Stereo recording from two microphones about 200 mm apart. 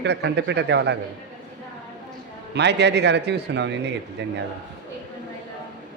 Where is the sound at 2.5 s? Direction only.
60° right (ahead or behind).